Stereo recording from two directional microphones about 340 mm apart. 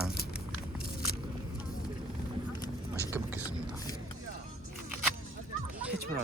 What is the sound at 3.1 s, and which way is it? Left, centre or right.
Speech, centre.